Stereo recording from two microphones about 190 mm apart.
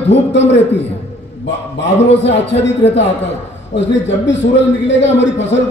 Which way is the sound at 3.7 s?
70° left (ahead or behind).